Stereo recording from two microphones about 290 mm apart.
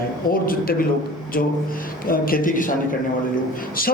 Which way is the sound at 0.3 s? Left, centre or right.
Left.